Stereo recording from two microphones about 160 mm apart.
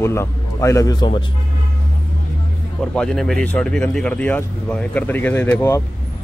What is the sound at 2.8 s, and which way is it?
Speech, 5° left (ahead or behind).